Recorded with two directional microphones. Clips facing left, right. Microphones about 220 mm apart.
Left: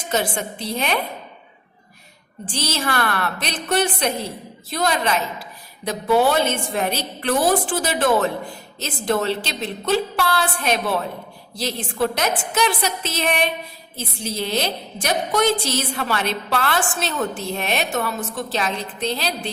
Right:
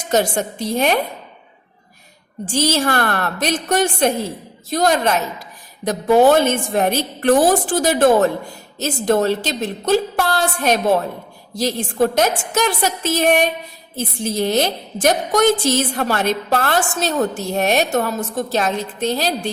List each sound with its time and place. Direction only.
0.1 s a woman's voice: 45° right (ahead or behind)
2.5 s a woman's voice: 45° right (ahead or behind)